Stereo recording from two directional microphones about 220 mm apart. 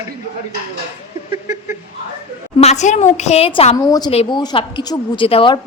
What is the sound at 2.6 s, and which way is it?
Speech, 30° left (ahead or behind).